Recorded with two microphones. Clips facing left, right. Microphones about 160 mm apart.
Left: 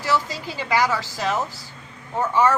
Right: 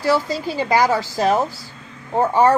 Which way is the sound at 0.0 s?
40° right (ahead or behind).